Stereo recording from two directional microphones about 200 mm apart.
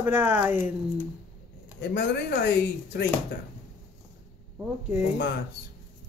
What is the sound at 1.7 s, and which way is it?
Speech, 60° left (ahead or behind).